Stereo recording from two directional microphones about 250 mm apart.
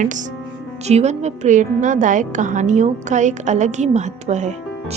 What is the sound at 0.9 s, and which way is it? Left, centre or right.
A woman's voice, right.